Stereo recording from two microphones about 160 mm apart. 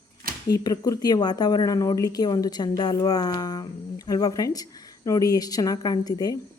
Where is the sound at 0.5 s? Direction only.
25° left (ahead or behind).